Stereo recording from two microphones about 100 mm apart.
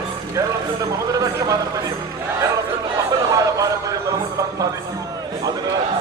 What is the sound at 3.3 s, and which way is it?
Music, 35° right (ahead or behind).